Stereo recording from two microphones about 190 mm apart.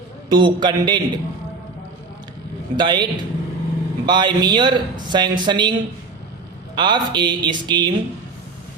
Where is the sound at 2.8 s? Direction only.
25° right (ahead or behind).